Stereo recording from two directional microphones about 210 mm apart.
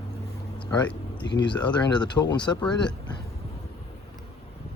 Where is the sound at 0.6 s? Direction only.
20° left (ahead or behind).